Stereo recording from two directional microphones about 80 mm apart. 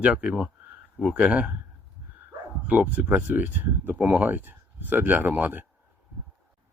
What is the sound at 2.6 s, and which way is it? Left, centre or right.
Speech, centre.